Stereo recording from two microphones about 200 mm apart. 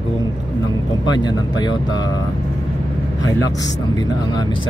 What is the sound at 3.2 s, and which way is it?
Speech, 20° left (ahead or behind).